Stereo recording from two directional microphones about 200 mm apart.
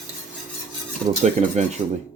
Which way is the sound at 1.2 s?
35° right (ahead or behind).